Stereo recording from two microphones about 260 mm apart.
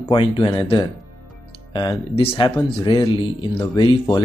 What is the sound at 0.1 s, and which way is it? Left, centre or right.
Speech, centre.